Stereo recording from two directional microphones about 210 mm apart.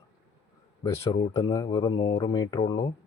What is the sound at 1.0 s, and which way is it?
Speech, 20° left (ahead or behind).